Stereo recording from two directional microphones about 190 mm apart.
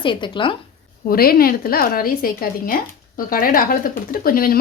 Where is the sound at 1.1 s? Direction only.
50° left (ahead or behind).